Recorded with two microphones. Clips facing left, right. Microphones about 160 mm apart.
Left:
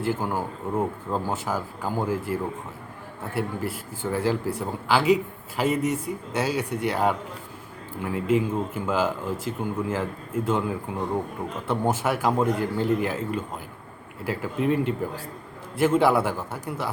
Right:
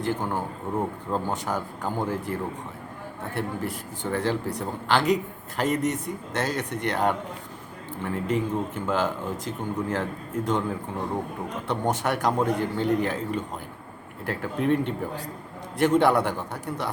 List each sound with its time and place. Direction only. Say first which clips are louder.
0.0 s a man's voice: left 1 dB; 5° left (ahead or behind)